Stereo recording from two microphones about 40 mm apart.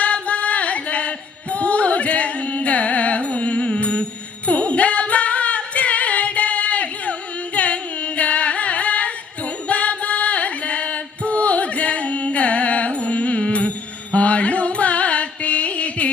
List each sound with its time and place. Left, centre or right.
0.0 s music: left